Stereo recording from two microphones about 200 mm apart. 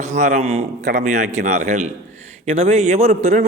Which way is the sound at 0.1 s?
35° right (ahead or behind).